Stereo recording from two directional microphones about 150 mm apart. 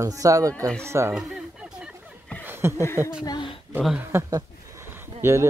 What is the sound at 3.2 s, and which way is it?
Speech, 30° left (ahead or behind).